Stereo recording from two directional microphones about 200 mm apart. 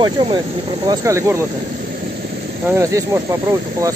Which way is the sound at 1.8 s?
45° right (ahead or behind).